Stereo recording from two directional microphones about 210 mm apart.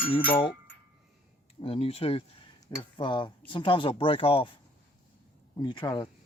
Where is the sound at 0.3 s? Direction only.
25° left (ahead or behind).